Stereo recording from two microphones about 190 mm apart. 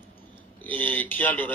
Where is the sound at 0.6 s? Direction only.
10° left (ahead or behind).